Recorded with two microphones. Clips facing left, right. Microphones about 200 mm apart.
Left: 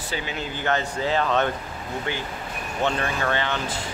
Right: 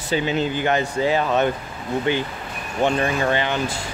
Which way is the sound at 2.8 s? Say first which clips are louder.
Right 5 dB; 15° right (ahead or behind).